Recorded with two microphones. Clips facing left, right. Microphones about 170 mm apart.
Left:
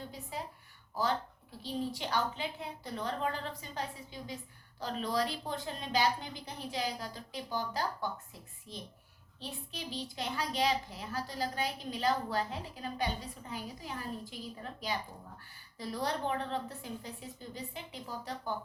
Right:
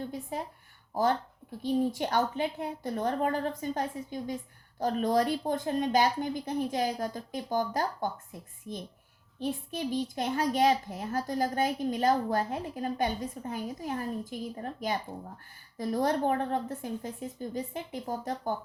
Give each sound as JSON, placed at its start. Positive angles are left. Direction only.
{"t": 0.1, "sound": "a child's voice", "side_deg": -50}